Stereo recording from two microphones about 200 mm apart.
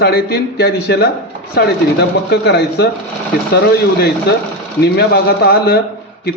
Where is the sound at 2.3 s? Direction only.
55° left (ahead or behind).